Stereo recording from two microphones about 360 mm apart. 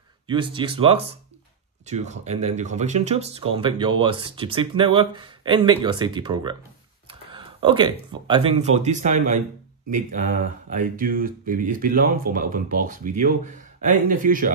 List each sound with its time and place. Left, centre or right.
0.3 s speech: centre